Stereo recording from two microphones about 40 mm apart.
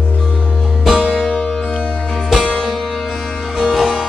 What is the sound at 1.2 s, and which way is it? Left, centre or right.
Music, left.